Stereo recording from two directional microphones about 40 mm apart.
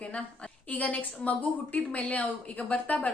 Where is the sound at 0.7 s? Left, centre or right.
Left.